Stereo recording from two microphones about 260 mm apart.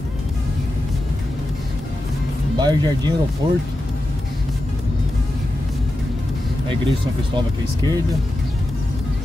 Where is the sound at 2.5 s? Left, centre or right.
Centre.